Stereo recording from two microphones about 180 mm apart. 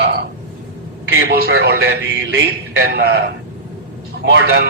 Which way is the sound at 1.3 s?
60° right (ahead or behind).